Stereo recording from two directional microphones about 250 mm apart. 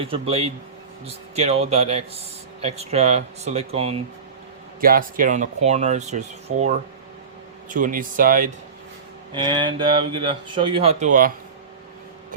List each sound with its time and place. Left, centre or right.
0.0 s speech: right
4.8 s speech: right
9.3 s speech: centre